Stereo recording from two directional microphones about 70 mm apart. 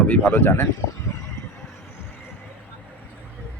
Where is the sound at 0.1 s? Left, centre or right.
Left.